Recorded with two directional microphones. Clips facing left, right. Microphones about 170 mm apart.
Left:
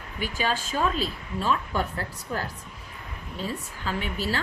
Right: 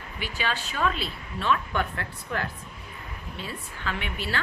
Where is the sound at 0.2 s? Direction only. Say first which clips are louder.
Left 3 dB; 45° left (ahead or behind).